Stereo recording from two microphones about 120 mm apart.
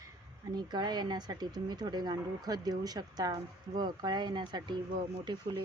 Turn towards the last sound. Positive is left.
turn(degrees=-35)  # may be behind; listen again after turning